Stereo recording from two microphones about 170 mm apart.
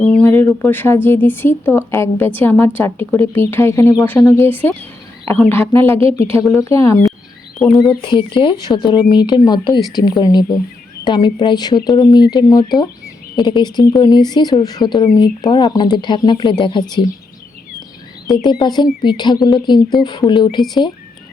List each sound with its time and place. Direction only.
0.0 s speech: 5° left (ahead or behind)
7.6 s speech: centre (ahead or behind)
8.0 s speech: 30° left (ahead or behind)
18.4 s speech: 25° left (ahead or behind)